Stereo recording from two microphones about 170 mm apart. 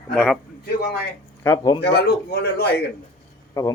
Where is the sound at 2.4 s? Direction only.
70° left (ahead or behind).